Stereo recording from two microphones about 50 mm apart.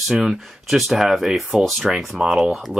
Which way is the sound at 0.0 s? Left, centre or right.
Centre.